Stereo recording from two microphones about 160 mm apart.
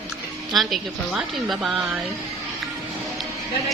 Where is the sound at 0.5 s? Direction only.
Centre (ahead or behind).